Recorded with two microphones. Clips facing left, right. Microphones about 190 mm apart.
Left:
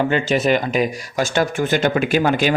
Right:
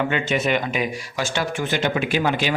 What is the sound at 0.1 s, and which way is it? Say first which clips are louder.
A man's voice: left 4 dB; 35° left (ahead or behind).